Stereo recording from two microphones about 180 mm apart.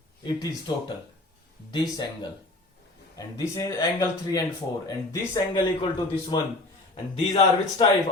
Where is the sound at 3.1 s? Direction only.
20° left (ahead or behind).